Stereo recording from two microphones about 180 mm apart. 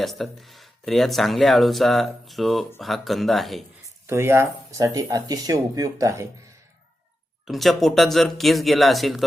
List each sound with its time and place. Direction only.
0.0 s speech: centre (ahead or behind)
4.0 s speech: 15° right (ahead or behind)
7.4 s speech: centre (ahead or behind)